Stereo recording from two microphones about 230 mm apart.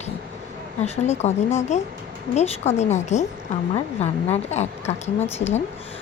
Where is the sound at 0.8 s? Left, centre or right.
Left.